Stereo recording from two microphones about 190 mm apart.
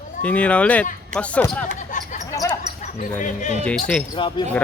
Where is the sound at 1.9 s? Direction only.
45° left (ahead or behind).